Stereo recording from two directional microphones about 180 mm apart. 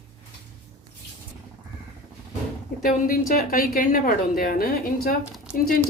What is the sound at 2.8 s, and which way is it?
A woman's voice, 50° left (ahead or behind).